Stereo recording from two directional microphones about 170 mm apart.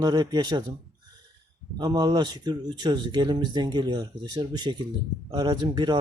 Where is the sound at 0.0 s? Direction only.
25° right (ahead or behind).